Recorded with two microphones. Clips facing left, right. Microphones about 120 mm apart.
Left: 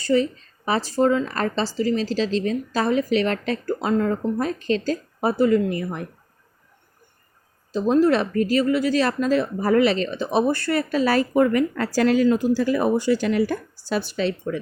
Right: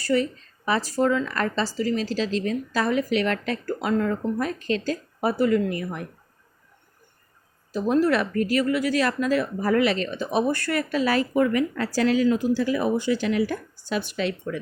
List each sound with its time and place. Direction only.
0.0 s speech: 25° left (ahead or behind)
7.7 s a woman's voice: 25° left (ahead or behind)